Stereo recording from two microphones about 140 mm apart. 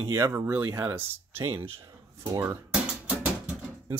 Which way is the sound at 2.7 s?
5° right (ahead or behind).